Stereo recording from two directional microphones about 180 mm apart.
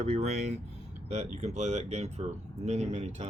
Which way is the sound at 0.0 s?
35° right (ahead or behind).